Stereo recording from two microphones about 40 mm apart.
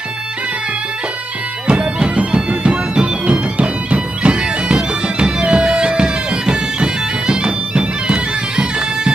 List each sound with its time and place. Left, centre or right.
1.7 s music: right
5.0 s bagpipes: right